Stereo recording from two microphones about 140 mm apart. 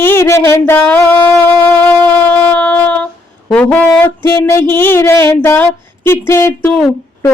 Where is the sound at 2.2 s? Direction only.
10° left (ahead or behind).